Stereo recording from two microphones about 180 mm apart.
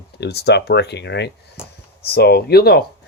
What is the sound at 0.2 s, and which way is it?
Speech, 65° left (ahead or behind).